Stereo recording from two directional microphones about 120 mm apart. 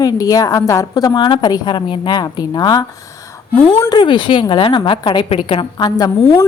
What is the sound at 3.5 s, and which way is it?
Speech, 15° left (ahead or behind).